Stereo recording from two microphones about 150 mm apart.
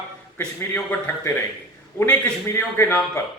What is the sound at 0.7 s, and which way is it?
A man's voice, 10° left (ahead or behind).